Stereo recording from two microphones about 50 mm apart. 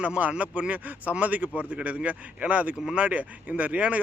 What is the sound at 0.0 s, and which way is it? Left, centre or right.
Speech, right.